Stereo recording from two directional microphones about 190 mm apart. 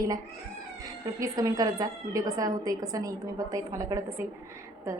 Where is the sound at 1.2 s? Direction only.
20° right (ahead or behind).